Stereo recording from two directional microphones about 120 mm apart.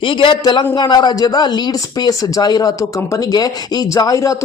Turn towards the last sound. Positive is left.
turn(degrees=30)  # may be behind; listen again after turning